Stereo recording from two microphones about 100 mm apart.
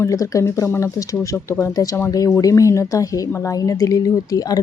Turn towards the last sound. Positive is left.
turn(degrees=40)  # may be behind; listen again after turning